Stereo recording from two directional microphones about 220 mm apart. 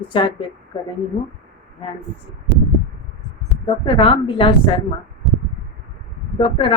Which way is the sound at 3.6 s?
25° left (ahead or behind).